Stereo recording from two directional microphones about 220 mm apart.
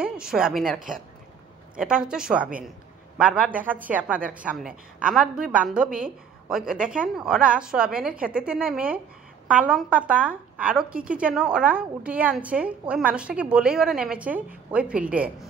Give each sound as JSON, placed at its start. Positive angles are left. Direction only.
{"t": 0.0, "sound": "speech", "side_deg": -5}
{"t": 0.7, "sound": "speech", "side_deg": -40}
{"t": 1.8, "sound": "a woman's voice", "side_deg": -5}